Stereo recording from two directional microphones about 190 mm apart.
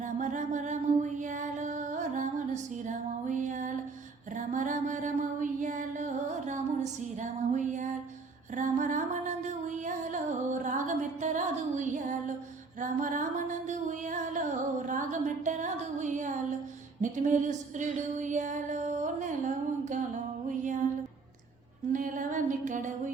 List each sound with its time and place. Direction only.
0.0 s music: 40° right (ahead or behind)
4.4 s mantra: 40° right (ahead or behind)
8.5 s music: 40° right (ahead or behind)
21.9 s a sound: 45° right (ahead or behind)